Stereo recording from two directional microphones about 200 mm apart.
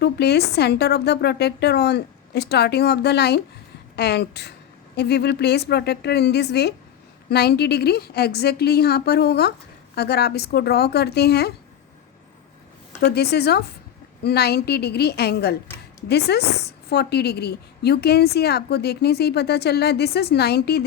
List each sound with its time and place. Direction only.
0.0 s a woman's voice: 55° left (ahead or behind)
13.1 s a woman's voice: 55° left (ahead or behind)